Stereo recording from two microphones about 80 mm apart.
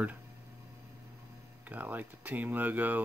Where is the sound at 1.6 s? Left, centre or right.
Right.